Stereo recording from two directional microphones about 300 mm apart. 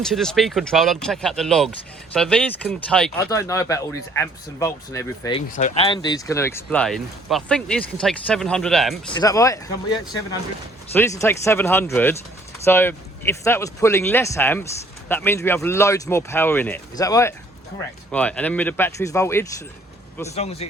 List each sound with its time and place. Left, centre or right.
0.0 s speech: centre
5.5 s speech: left; by 9.1 s centre
9.1 s speech: centre
20.3 s speech: left